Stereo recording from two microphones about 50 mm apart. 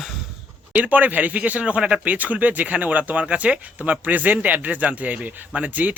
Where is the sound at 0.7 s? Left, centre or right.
Right.